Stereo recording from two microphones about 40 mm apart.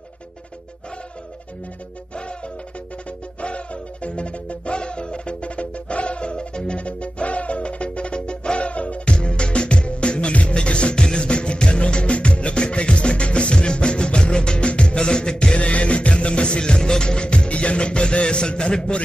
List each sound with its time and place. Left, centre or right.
3.3 s music: left